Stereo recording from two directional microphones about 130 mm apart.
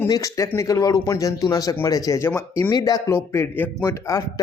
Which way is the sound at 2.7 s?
30° left (ahead or behind).